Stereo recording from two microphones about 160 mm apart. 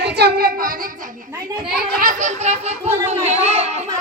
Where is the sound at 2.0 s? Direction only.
55° right (ahead or behind).